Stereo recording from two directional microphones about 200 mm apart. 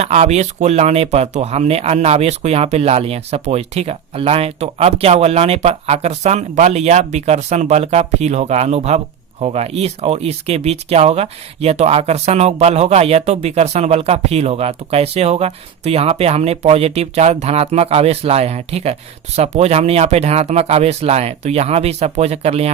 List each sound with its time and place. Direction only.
0.0 s speech: 35° right (ahead or behind)